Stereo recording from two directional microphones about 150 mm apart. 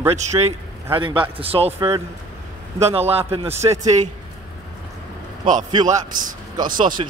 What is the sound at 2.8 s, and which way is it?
Speech, 45° right (ahead or behind).